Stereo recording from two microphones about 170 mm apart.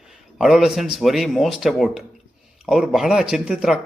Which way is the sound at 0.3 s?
Centre (ahead or behind).